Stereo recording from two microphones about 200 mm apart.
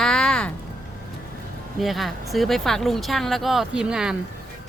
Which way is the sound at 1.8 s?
Centre (ahead or behind).